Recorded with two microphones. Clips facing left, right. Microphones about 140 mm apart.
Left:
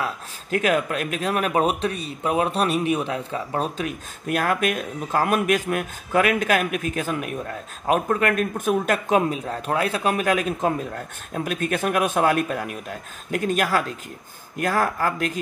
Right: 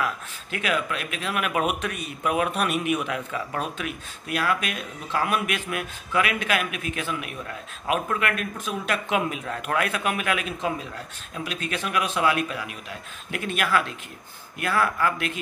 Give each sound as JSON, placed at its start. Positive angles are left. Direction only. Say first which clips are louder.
{"t": 0.5, "sound": "a man's voice", "louder": "left 6 dB", "side_deg": 45}